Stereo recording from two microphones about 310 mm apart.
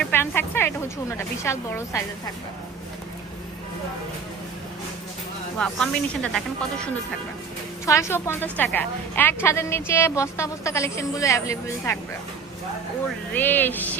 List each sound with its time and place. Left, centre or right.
0.0 s a woman's voice: centre
5.5 s speech: centre
7.9 s a woman's voice: centre
13.3 s speech: centre